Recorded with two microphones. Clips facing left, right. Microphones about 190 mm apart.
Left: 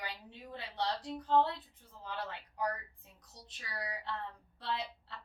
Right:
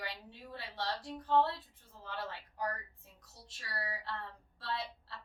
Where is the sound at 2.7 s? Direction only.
15° left (ahead or behind).